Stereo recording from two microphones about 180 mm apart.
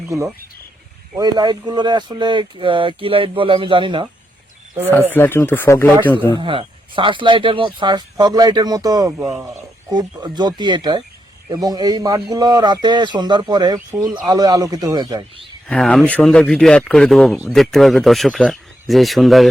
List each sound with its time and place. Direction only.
1.1 s speech: 25° right (ahead or behind)
5.1 s speech: 10° left (ahead or behind)
6.4 s speech: 30° right (ahead or behind)
13.7 s speech: 10° right (ahead or behind)
14.3 s speech: 20° right (ahead or behind)
15.6 s speech: 5° left (ahead or behind)